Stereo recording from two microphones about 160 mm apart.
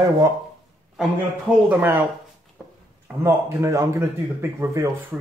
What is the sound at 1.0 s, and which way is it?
A man's voice, 10° right (ahead or behind).